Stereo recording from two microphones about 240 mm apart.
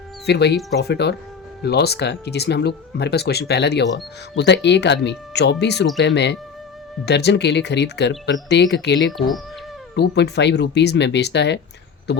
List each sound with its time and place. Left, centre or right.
0.3 s speech: left